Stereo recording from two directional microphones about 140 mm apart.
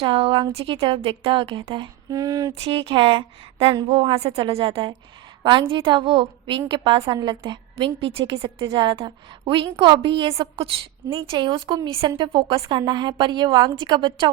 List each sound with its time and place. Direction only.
0.0 s a woman's voice: 40° right (ahead or behind)
2.6 s a woman's voice: 40° right (ahead or behind)